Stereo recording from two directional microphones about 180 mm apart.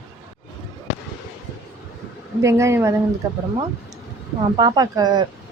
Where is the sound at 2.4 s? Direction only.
15° right (ahead or behind).